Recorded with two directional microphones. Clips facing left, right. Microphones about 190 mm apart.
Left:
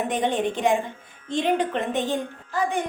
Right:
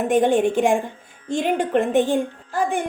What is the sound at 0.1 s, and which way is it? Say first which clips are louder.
A woman's voice: right 7 dB; 50° right (ahead or behind).